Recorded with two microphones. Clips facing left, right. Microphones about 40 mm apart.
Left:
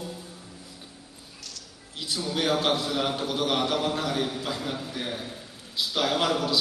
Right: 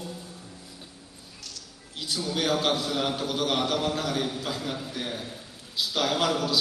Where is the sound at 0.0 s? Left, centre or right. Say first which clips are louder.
Left 1 dB; centre.